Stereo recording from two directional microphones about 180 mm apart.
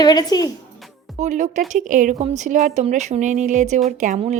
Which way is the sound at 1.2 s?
45° right (ahead or behind).